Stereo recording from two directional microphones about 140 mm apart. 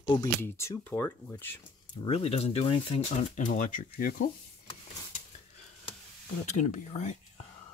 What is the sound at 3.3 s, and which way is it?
Speech, 65° left (ahead or behind).